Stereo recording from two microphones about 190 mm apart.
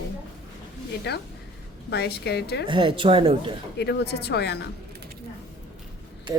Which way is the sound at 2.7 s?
25° right (ahead or behind).